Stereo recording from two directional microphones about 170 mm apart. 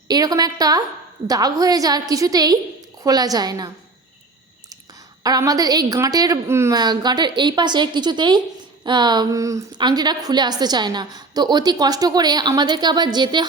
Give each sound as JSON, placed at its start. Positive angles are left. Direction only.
{"t": 0.1, "sound": "a woman's voice", "side_deg": -20}
{"t": 5.2, "sound": "a woman's voice", "side_deg": -20}